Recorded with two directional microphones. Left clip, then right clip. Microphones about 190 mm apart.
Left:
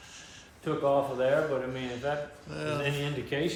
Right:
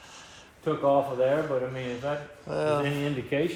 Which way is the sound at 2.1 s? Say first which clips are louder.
Right 4 dB; centre (ahead or behind).